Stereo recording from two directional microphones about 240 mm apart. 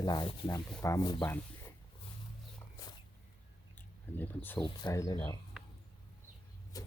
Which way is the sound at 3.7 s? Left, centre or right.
Centre.